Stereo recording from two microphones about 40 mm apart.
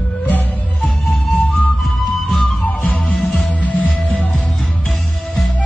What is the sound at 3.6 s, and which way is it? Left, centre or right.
Music, left.